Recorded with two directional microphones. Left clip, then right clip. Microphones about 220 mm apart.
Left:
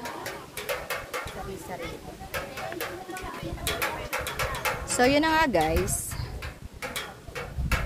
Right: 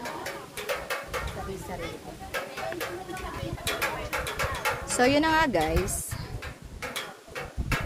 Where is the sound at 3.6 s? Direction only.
50° left (ahead or behind).